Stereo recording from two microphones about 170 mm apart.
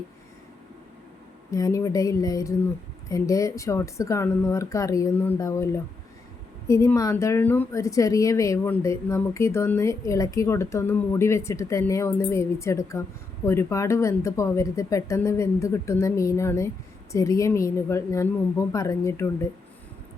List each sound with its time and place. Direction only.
1.5 s a woman's voice: 20° left (ahead or behind)